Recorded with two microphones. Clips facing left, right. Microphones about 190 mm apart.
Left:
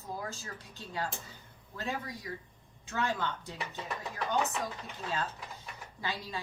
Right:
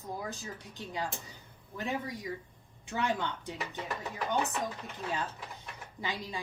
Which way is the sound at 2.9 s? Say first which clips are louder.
Right 1 dB; 15° right (ahead or behind).